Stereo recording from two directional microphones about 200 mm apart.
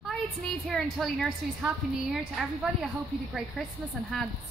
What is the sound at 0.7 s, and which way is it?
A woman's voice, centre (ahead or behind).